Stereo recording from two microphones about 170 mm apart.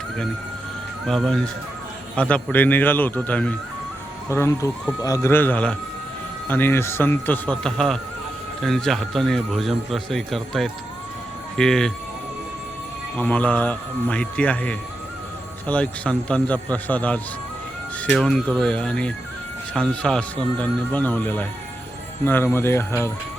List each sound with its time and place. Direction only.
1.0 s a man's voice: centre (ahead or behind)
13.1 s a man's voice: 10° left (ahead or behind)